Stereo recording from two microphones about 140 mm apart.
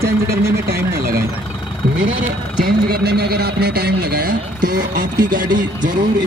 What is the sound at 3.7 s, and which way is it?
Speech, 90° right.